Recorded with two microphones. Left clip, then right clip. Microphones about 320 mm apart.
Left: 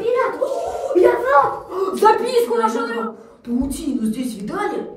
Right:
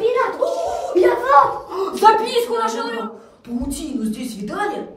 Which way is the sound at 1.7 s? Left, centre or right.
Centre.